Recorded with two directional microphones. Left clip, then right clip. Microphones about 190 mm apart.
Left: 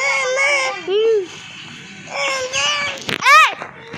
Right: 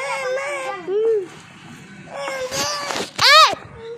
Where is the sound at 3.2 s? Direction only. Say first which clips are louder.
Left 1 dB; 80° right.